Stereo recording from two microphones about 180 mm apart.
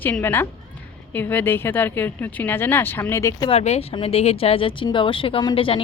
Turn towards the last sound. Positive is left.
turn(degrees=30)  # may be behind; listen again after turning